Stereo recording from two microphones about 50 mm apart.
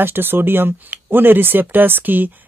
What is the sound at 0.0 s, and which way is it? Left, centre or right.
Speech, right.